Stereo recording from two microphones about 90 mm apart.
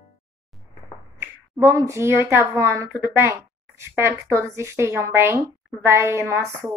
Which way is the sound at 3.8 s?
30° right (ahead or behind).